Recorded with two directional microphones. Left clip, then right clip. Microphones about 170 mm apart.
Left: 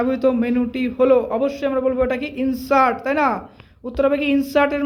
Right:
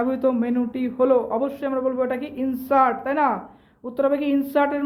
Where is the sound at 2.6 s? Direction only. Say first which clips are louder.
Left 2 dB; 20° left (ahead or behind).